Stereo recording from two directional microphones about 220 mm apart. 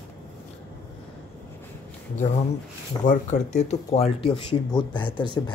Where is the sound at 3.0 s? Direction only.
35° left (ahead or behind).